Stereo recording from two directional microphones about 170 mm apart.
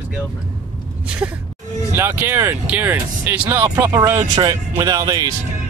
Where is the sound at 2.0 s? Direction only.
10° right (ahead or behind).